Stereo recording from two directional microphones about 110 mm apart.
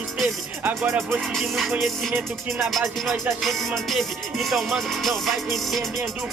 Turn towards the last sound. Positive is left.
turn(degrees=0)  # may be behind; listen again after turning